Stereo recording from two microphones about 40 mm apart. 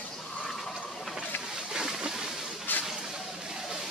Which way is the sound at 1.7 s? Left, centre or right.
Centre.